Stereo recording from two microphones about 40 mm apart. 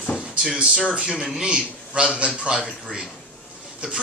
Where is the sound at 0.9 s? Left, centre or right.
Right.